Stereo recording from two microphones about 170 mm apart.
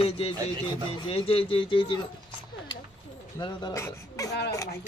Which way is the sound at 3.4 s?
20° left (ahead or behind).